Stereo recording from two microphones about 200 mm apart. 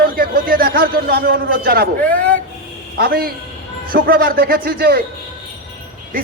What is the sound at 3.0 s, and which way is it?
A man's voice, 50° right (ahead or behind).